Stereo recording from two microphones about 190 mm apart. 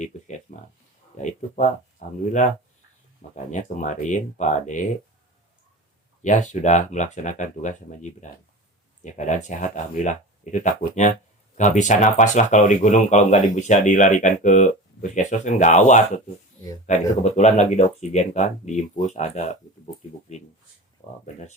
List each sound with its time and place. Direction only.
0.0 s a sound: 40° left (ahead or behind)
2.0 s speech: 40° left (ahead or behind)
3.2 s speech: 40° left (ahead or behind)
6.2 s speech: 40° left (ahead or behind)